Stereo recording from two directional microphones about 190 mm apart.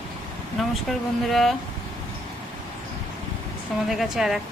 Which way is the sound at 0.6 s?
Centre (ahead or behind).